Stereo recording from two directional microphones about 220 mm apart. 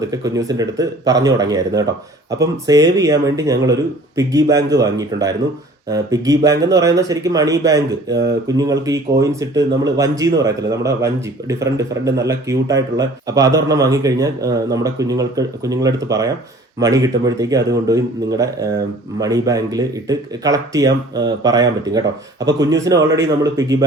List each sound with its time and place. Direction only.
0.1 s speech: 15° right (ahead or behind)